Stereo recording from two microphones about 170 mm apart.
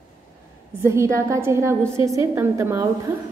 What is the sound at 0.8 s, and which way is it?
A woman's voice, 15° right (ahead or behind).